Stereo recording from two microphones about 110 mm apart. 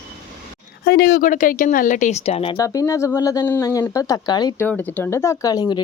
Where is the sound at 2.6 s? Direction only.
30° left (ahead or behind).